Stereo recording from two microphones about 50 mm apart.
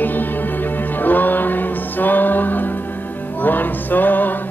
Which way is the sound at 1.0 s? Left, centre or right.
Left.